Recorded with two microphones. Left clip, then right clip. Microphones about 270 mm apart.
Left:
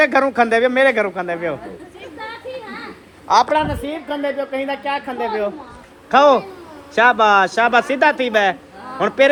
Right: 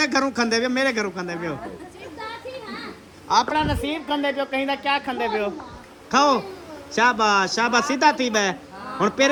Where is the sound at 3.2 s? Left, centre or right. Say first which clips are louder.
Left 5 dB; centre.